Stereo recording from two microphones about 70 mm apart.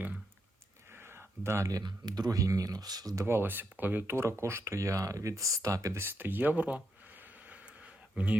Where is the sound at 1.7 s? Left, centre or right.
Right.